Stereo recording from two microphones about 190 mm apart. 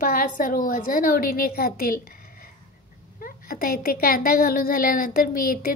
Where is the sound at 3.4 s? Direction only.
50° left (ahead or behind).